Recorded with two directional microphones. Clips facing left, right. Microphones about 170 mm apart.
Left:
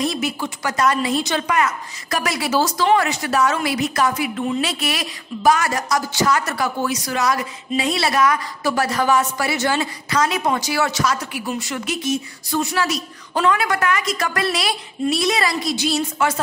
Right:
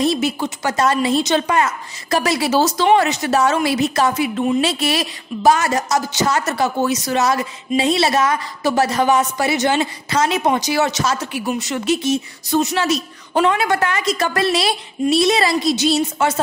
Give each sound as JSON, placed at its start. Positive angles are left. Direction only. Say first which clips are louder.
{"t": 0.0, "sound": "a woman's voice", "louder": "right 4 dB", "side_deg": -25}